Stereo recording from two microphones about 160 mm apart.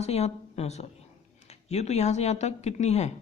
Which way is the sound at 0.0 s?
40° left (ahead or behind).